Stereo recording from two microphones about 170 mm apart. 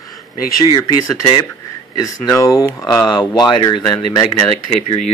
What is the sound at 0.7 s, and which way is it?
Speech, 20° left (ahead or behind).